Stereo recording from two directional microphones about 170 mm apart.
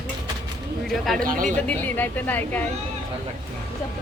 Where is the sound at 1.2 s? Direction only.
50° right (ahead or behind).